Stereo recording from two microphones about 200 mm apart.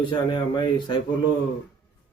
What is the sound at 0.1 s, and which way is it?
Speech, 25° left (ahead or behind).